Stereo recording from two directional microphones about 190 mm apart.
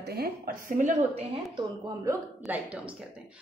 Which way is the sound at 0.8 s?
40° right (ahead or behind).